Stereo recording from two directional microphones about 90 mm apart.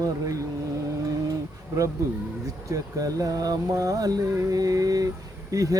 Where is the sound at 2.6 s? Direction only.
40° right (ahead or behind).